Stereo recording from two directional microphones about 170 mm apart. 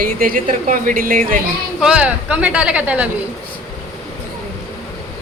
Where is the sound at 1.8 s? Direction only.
5° right (ahead or behind).